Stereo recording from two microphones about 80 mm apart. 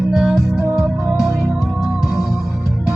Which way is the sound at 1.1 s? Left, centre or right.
Centre.